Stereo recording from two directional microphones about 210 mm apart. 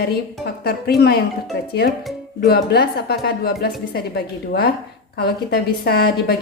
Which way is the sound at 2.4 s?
50° left (ahead or behind).